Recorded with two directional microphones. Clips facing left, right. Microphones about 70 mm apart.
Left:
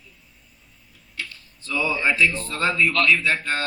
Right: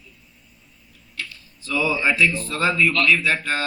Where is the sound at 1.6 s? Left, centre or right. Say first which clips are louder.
Right 2 dB; centre.